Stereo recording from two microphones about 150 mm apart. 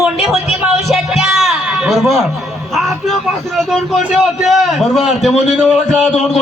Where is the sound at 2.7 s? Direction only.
Centre (ahead or behind).